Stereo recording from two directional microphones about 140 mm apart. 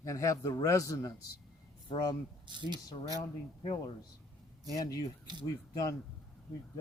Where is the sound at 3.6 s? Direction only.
40° left (ahead or behind).